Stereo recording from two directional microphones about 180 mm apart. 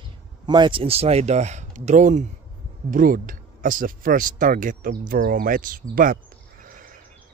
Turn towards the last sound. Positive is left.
turn(degrees=-50)  # may be behind; listen again after turning